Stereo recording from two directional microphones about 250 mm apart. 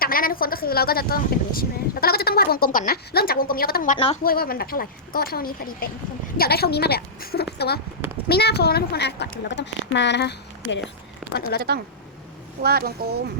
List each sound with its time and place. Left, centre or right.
0.0 s a woman's voice: left
3.9 s a woman's voice: left
4.2 s a woman's voice: left
12.6 s speech: right